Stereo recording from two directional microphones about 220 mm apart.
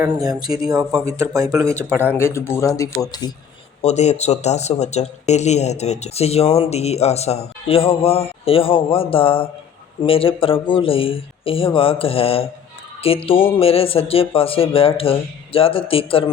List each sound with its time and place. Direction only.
0.0 s speech: 15° right (ahead or behind)
2.0 s speech: 10° left (ahead or behind)
3.8 s speech: 30° left (ahead or behind)